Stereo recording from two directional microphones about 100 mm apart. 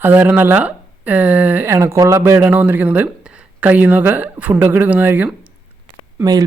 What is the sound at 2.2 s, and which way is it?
Speech, 20° right (ahead or behind).